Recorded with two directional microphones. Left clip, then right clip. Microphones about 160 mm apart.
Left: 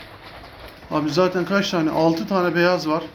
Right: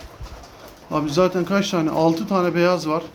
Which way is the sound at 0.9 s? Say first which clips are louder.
Even; 15° right (ahead or behind).